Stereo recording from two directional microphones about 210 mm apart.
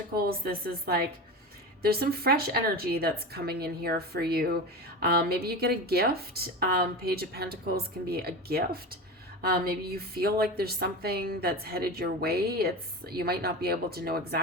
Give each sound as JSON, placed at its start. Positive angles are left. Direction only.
{"t": 0.1, "sound": "a woman's voice", "side_deg": -45}